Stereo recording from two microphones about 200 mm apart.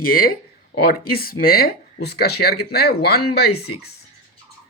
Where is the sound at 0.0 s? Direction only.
45° left (ahead or behind).